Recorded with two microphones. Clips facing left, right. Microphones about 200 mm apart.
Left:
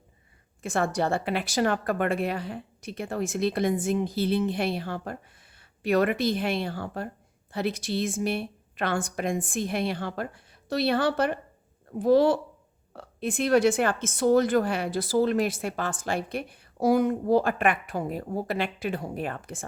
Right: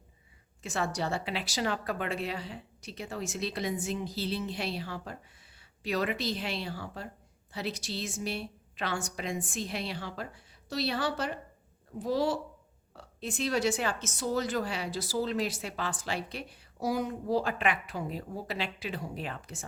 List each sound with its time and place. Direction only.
0.6 s a woman's voice: 50° left (ahead or behind)